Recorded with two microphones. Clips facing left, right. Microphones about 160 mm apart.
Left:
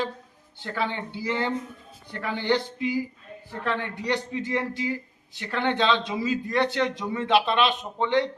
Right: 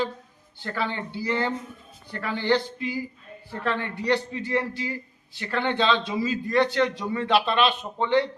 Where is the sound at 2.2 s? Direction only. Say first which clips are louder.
Right 1 dB; 15° left (ahead or behind).